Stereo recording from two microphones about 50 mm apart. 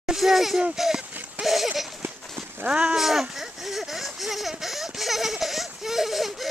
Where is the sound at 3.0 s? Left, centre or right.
Centre.